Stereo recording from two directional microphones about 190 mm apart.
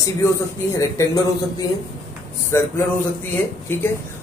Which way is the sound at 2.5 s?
15° left (ahead or behind).